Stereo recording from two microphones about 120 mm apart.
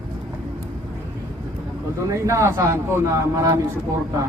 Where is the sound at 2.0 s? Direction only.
25° right (ahead or behind).